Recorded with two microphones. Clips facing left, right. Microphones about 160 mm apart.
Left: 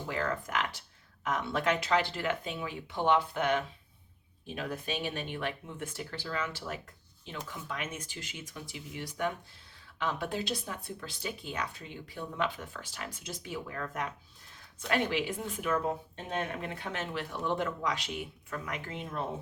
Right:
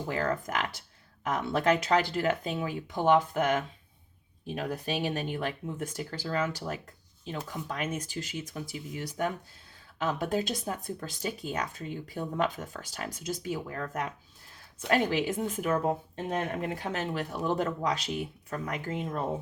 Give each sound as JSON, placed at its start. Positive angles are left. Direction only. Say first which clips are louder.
{"t": 0.1, "sound": "speech", "louder": "right 3 dB", "side_deg": -40}